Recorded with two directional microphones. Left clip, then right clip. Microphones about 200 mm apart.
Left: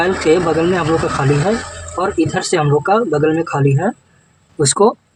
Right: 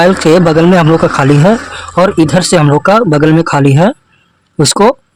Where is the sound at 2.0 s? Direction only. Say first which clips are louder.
Right 8 dB; 55° right (ahead or behind).